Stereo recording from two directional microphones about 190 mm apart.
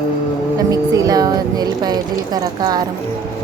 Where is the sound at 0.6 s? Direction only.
20° right (ahead or behind).